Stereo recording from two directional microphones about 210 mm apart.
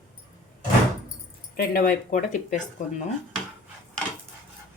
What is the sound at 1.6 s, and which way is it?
Speech, 40° left (ahead or behind).